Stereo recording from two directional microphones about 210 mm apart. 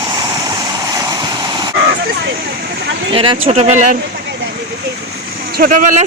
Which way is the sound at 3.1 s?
25° right (ahead or behind).